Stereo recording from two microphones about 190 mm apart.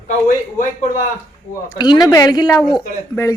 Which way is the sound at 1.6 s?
20° left (ahead or behind).